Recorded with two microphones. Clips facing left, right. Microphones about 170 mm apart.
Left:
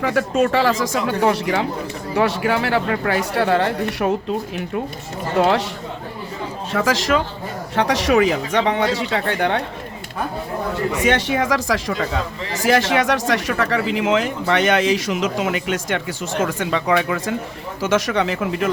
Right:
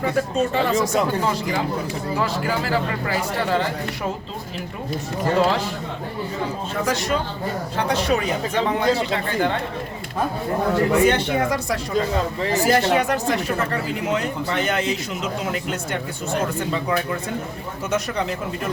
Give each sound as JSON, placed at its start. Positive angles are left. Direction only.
{"t": 0.0, "sound": "speech", "side_deg": 90}
{"t": 6.7, "sound": "speech", "side_deg": 90}
{"t": 11.0, "sound": "speech", "side_deg": 90}